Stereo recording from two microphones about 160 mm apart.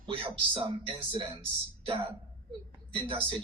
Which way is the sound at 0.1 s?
35° right (ahead or behind).